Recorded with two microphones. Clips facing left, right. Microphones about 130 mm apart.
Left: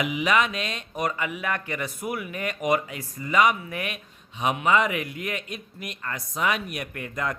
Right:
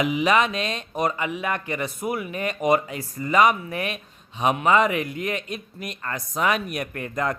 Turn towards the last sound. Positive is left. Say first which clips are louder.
# right 4 dB
turn(degrees=-40)  # may be behind; listen again after turning